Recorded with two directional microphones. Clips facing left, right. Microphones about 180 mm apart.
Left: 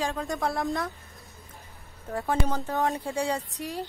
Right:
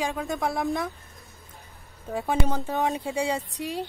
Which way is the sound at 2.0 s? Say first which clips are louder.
Right 2 dB; 15° right (ahead or behind).